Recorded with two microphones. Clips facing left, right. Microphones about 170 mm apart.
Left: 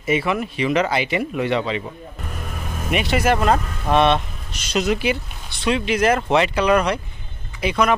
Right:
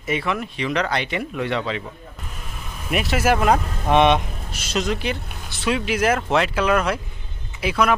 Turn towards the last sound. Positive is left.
turn(degrees=-5)  # may be behind; listen again after turning